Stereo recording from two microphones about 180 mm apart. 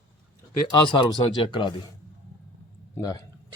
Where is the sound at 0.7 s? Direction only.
25° left (ahead or behind).